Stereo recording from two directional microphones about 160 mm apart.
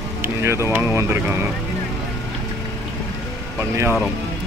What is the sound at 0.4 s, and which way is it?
Speech, 15° right (ahead or behind).